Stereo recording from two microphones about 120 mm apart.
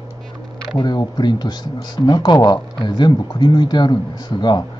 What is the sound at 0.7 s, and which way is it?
Speech, 35° left (ahead or behind).